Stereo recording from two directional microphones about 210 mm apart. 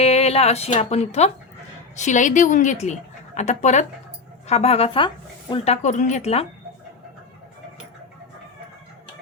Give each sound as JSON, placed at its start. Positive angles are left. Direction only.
{"t": 0.0, "sound": "speech", "side_deg": 30}